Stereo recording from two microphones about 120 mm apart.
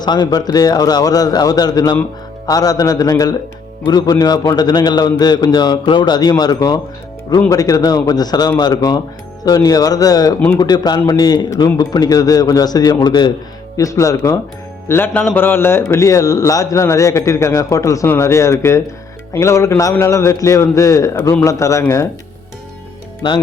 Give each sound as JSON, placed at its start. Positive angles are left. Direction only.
{"t": 0.0, "sound": "a man's voice", "side_deg": 35}